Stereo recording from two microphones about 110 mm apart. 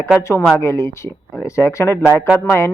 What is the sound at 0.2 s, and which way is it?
Speech, 25° left (ahead or behind).